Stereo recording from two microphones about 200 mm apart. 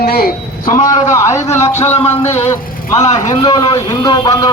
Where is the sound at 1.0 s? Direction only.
15° left (ahead or behind).